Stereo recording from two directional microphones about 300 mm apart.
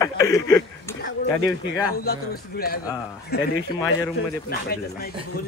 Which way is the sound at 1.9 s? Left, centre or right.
Left.